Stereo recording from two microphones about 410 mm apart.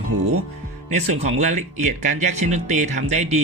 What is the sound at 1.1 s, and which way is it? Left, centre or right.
Speech, centre.